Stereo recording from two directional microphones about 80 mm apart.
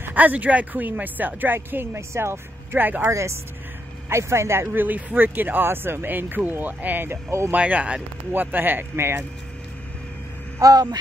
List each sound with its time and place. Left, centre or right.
0.0 s speech: right
3.1 s speech: right
7.5 s speech: centre
10.6 s speech: right